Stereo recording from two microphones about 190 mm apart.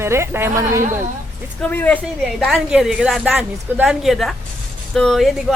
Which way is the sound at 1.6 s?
10° left (ahead or behind).